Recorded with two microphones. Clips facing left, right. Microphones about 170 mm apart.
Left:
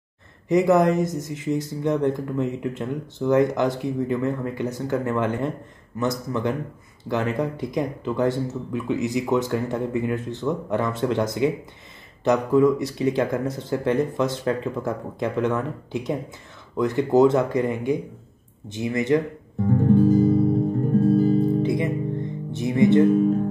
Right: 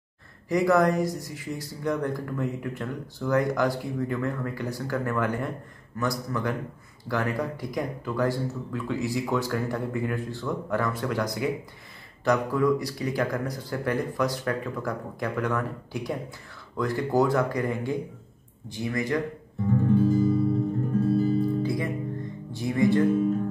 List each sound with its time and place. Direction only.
0.5 s speech: 20° left (ahead or behind)
19.8 s guitar: 50° left (ahead or behind)
21.0 s music: 50° left (ahead or behind)
21.4 s music: 20° left (ahead or behind)